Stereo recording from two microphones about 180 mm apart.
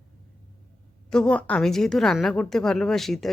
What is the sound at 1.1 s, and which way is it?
Speech, 5° left (ahead or behind).